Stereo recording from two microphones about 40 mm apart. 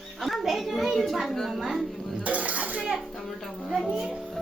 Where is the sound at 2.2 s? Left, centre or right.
Right.